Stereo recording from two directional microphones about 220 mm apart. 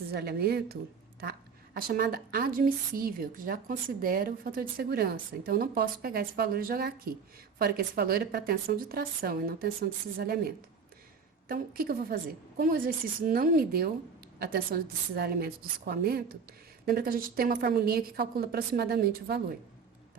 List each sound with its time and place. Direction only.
0.1 s a woman's voice: 45° right (ahead or behind)